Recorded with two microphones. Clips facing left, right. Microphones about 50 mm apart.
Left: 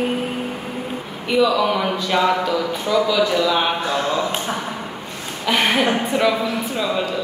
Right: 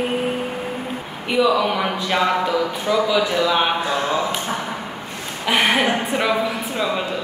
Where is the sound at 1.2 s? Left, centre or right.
Centre.